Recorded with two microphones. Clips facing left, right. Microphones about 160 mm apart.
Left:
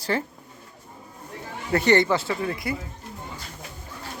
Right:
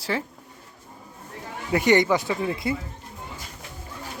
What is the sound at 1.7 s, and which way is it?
Speech, 15° right (ahead or behind).